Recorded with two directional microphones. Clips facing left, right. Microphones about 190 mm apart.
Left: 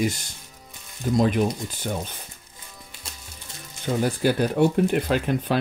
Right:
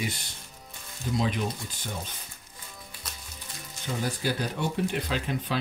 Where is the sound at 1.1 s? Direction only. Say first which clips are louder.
Left 8 dB; 50° left (ahead or behind).